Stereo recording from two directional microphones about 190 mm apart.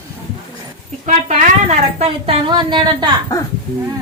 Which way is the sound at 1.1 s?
35° right (ahead or behind).